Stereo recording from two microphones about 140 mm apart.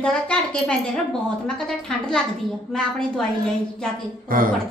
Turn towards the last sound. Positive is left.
turn(degrees=-90)